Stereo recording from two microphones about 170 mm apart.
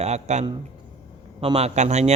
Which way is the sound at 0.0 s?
40° right (ahead or behind).